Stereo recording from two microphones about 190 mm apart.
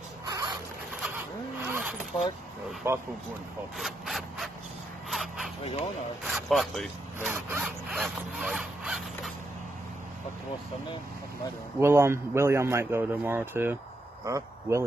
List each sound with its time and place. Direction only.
0.3 s a sound: 20° right (ahead or behind)
1.7 s zipper: 10° right (ahead or behind)
2.8 s a man's voice: 10° right (ahead or behind)
3.7 s a sound: centre (ahead or behind)
6.2 s a man's voice: centre (ahead or behind)
7.2 s a man's voice: 10° right (ahead or behind)
7.6 s zipper: 5° right (ahead or behind)
11.8 s a man's voice: 15° right (ahead or behind)